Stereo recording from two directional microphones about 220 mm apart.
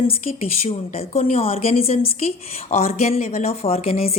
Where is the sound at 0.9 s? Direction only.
30° left (ahead or behind).